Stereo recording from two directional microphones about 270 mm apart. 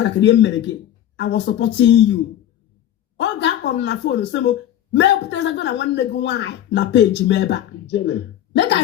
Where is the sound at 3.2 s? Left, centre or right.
Left.